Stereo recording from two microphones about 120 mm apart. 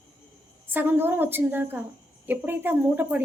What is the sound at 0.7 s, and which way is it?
Speech, 15° right (ahead or behind).